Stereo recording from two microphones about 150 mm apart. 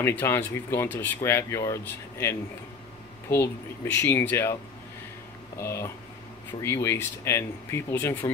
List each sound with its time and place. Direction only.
0.0 s speech: 15° left (ahead or behind)
5.6 s speech: 15° left (ahead or behind)